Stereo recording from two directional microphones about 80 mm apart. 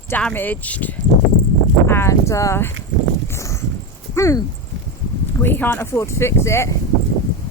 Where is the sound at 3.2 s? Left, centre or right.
Left.